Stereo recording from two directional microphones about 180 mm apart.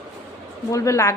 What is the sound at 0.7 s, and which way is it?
Speech, 15° left (ahead or behind).